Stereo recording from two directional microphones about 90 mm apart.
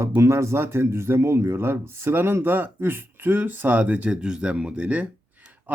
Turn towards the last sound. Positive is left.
turn(degrees=-15)  # may be behind; listen again after turning